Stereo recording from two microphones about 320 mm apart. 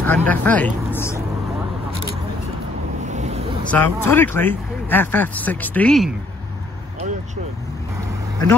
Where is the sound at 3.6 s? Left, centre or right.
Centre.